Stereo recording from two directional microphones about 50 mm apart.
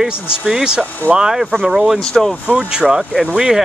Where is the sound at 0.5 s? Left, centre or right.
Centre.